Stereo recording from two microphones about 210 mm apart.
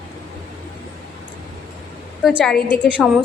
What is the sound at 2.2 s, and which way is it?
Speech, centre (ahead or behind).